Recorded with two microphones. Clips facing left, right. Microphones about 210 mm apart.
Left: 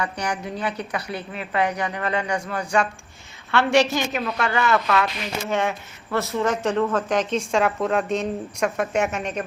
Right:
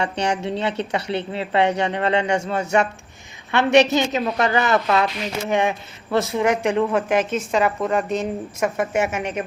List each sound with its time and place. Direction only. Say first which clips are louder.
0.0 s a woman's voice: right 5 dB; 25° right (ahead or behind); by 9.2 s 5° right (ahead or behind)